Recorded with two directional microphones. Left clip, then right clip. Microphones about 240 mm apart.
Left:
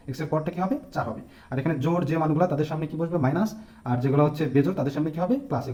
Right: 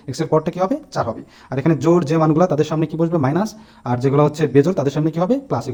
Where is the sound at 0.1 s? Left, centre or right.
Right.